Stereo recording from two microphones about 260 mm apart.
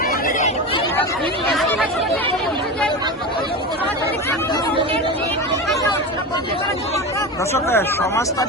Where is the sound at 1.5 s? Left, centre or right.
Centre.